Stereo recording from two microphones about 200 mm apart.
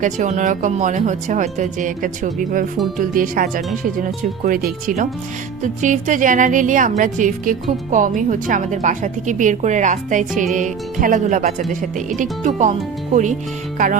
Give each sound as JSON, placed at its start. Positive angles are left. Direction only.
{"t": 0.0, "sound": "speech", "side_deg": -35}